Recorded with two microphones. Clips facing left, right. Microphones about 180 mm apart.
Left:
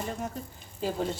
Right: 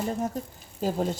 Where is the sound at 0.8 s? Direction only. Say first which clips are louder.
Right 3 dB; 45° right (ahead or behind).